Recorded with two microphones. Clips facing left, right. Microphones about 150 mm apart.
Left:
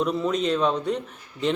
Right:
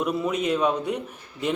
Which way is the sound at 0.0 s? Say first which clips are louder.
Left 1 dB; 10° right (ahead or behind).